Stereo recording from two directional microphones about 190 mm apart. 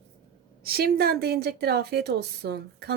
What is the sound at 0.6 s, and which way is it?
A woman's voice, 55° right (ahead or behind).